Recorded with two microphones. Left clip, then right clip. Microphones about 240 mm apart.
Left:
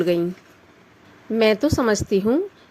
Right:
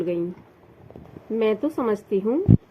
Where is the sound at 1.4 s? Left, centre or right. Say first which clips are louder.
Left 5 dB; left.